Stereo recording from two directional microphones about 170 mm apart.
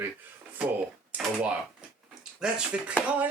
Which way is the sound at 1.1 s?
5° right (ahead or behind).